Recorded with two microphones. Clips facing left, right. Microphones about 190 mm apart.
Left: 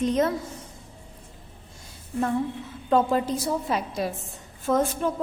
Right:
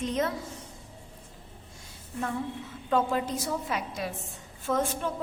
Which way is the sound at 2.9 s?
35° left (ahead or behind).